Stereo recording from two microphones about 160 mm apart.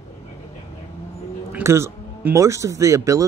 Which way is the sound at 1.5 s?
15° right (ahead or behind).